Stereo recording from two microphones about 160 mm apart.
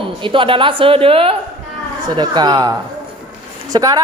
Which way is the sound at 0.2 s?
30° right (ahead or behind).